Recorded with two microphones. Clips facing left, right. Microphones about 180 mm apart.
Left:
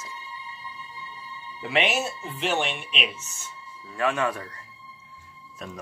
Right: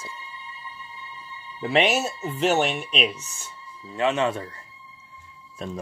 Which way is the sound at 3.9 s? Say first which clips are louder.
Right 3 dB; 20° right (ahead or behind).